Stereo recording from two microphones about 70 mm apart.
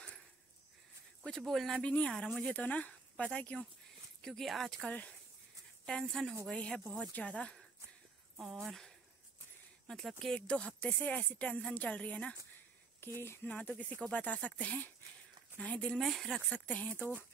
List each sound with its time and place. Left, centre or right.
1.2 s speech: centre
1.7 s a woman's voice: centre
4.2 s speech: centre
4.8 s a woman's voice: centre
6.5 s speech: centre
8.4 s a woman's voice: centre
13.0 s speech: left
13.5 s a woman's voice: left
16.0 s speech: centre
16.4 s a woman's voice: centre